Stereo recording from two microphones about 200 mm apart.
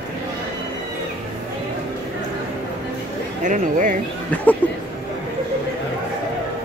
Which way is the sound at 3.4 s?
40° right (ahead or behind).